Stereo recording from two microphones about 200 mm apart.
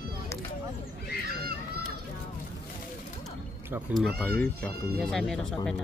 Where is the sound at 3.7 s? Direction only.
Centre (ahead or behind).